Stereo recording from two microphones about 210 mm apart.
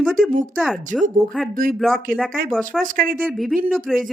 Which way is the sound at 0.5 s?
Centre (ahead or behind).